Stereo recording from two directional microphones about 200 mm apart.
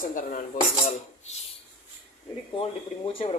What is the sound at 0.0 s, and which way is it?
Cutlery, 40° left (ahead or behind).